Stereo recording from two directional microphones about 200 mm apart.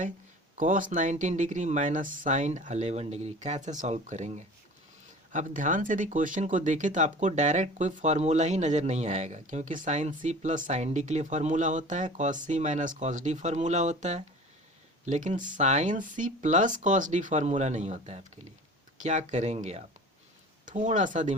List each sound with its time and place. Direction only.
0.5 s speech: 40° right (ahead or behind)